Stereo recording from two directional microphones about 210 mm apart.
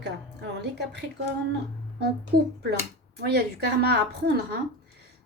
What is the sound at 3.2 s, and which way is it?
A woman's voice, 50° right (ahead or behind).